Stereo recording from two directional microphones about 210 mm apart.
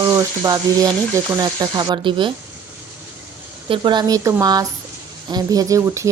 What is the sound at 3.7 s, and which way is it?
A woman's voice, 20° right (ahead or behind).